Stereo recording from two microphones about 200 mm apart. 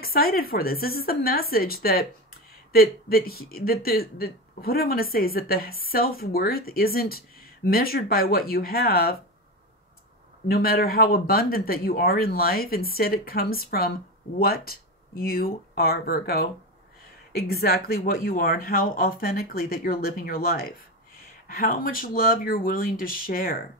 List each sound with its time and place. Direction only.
0.0 s speech: 50° left (ahead or behind)
10.5 s speech: 50° left (ahead or behind)